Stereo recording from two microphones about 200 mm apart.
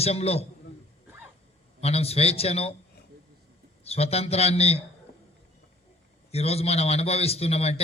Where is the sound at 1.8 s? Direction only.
30° left (ahead or behind).